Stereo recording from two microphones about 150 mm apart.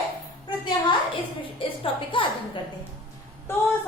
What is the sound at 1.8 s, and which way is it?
Speech, 35° left (ahead or behind).